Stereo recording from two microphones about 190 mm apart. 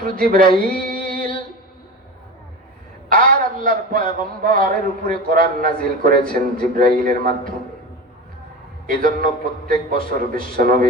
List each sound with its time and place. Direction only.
0.2 s a sound: 50° right (ahead or behind)
3.1 s a man's voice: 45° right (ahead or behind)
8.9 s a man's voice: 50° right (ahead or behind)